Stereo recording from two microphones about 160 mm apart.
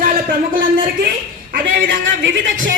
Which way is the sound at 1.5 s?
60° right (ahead or behind).